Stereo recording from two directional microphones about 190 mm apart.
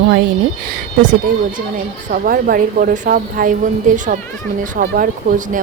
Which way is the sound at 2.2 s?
45° right (ahead or behind).